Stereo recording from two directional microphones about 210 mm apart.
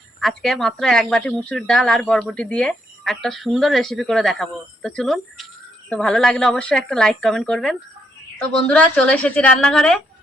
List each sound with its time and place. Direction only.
0.2 s speech: centre (ahead or behind)